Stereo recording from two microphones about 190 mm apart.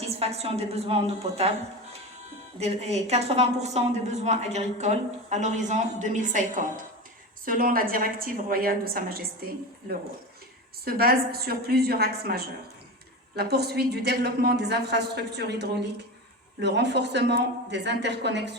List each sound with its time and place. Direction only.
0.2 s a woman's voice: 35° right (ahead or behind)
2.6 s a woman's voice: 35° right (ahead or behind); by 9.5 s 50° right (ahead or behind)
10.8 s a woman's voice: 55° right (ahead or behind)